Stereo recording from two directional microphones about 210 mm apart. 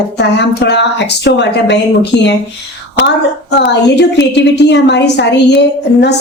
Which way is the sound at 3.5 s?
55° left (ahead or behind).